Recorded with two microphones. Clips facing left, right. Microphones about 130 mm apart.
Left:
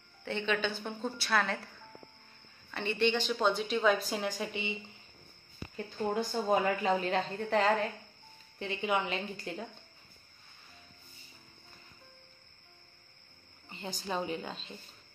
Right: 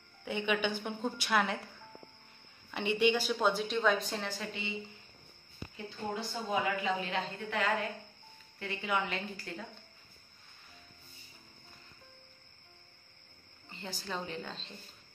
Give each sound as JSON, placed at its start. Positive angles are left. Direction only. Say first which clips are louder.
{"t": 0.2, "sound": "a woman's voice", "louder": "even", "side_deg": -10}
{"t": 2.7, "sound": "a woman's voice", "louder": "right 1 dB", "side_deg": -15}
{"t": 6.1, "sound": "a woman's voice", "louder": "left 5 dB", "side_deg": 45}
{"t": 8.5, "sound": "a woman's voice", "louder": "left 2 dB", "side_deg": 20}
{"t": 13.7, "sound": "a woman's voice", "louder": "left 3 dB", "side_deg": 20}